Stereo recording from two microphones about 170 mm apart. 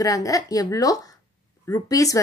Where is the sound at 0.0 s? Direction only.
20° left (ahead or behind).